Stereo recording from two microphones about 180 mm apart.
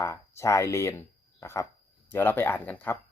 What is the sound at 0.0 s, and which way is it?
Speech, 15° left (ahead or behind).